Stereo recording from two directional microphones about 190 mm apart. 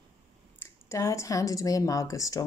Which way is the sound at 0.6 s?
15° left (ahead or behind).